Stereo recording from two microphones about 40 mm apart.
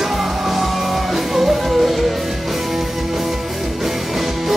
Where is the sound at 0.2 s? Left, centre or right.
Centre.